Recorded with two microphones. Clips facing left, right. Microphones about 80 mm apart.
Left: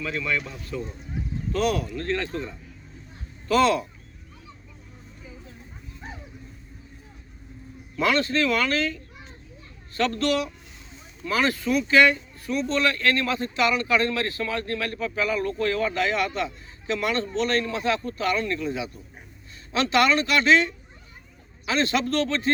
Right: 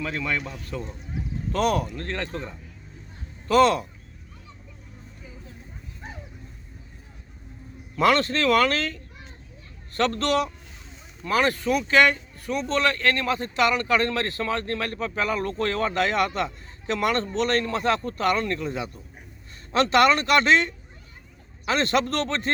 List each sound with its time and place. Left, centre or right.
0.0 s speech: right
2.0 s speech: right
3.5 s speech: right
7.9 s speech: right
10.1 s speech: right
11.2 s speech: right
13.6 s speech: right
21.7 s speech: right